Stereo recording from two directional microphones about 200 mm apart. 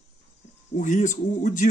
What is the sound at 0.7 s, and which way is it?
Speech, 40° left (ahead or behind).